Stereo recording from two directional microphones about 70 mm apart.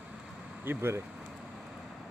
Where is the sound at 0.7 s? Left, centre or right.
Right.